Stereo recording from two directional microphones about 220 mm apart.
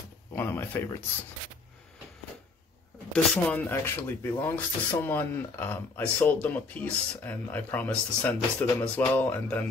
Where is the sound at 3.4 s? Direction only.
10° left (ahead or behind).